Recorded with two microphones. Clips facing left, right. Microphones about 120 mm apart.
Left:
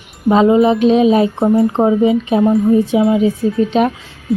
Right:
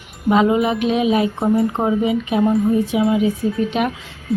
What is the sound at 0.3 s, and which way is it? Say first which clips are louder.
A woman's voice: left 5 dB; 30° left (ahead or behind).